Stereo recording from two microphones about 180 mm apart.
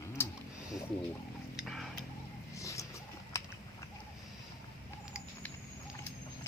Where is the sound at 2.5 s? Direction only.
15° left (ahead or behind).